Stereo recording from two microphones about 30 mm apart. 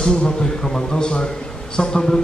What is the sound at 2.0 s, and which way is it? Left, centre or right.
Speech, centre.